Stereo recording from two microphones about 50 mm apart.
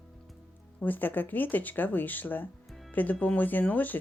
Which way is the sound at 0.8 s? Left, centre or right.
Left.